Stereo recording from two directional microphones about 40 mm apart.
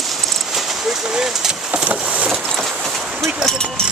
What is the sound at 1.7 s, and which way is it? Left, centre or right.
Vehicle, right.